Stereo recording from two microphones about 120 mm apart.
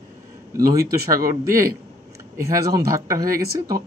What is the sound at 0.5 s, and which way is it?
Speech, 25° right (ahead or behind).